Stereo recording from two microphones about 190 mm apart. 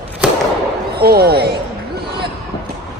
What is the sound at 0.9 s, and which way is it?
Speech, 55° right (ahead or behind).